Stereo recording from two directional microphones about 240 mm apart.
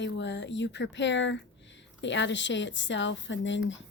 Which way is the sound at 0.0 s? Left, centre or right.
Left.